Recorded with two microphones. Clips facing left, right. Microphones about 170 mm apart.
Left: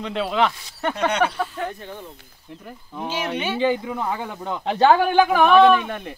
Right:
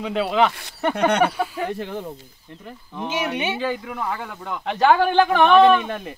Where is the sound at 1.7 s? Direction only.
80° right.